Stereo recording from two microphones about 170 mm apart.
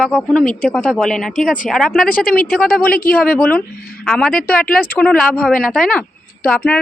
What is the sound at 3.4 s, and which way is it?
A woman's voice, 5° left (ahead or behind).